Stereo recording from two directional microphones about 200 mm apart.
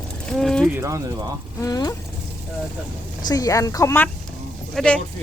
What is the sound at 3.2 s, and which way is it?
A woman's voice, 20° left (ahead or behind).